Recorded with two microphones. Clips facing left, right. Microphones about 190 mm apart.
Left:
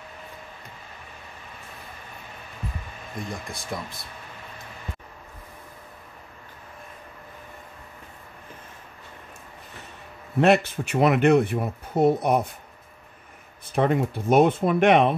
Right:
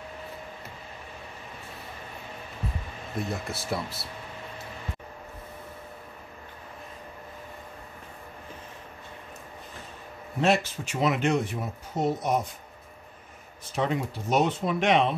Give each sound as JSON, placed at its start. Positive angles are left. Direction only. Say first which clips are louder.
{"t": 3.2, "sound": "speech", "louder": "right 3 dB", "side_deg": -5}
{"t": 10.4, "sound": "speech", "louder": "left 5 dB", "side_deg": 60}
{"t": 13.7, "sound": "speech", "louder": "left 6 dB", "side_deg": 55}